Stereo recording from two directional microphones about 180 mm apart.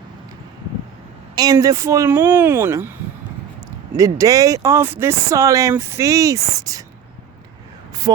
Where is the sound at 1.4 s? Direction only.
20° right (ahead or behind).